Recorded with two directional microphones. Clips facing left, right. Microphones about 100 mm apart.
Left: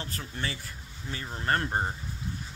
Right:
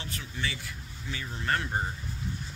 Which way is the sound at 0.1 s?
40° left (ahead or behind).